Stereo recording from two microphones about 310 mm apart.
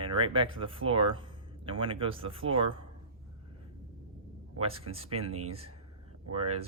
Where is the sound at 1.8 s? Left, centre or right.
Centre.